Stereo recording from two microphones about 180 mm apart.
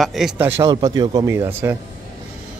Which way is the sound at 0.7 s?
20° right (ahead or behind).